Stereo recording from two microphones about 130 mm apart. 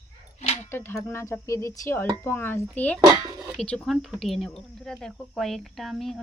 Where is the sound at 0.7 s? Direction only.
20° left (ahead or behind).